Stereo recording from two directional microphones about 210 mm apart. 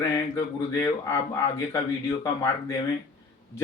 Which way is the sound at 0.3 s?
15° left (ahead or behind).